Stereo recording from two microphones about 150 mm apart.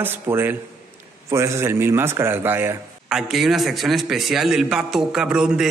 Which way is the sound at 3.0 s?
5° right (ahead or behind).